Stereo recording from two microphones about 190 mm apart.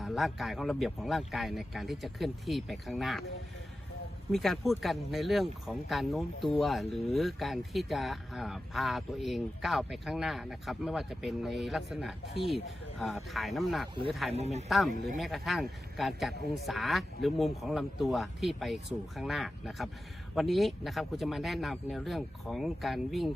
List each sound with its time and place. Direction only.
0.0 s speech: centre (ahead or behind)
4.3 s speech: centre (ahead or behind)
14.3 s speech: 35° right (ahead or behind)
15.2 s speech: centre (ahead or behind)